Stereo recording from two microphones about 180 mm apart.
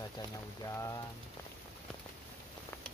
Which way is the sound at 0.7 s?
15° left (ahead or behind).